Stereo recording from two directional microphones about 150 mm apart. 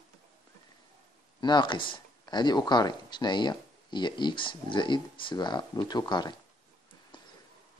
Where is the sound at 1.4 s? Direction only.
30° left (ahead or behind).